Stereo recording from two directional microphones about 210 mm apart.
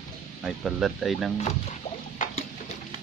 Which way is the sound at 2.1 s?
40° left (ahead or behind).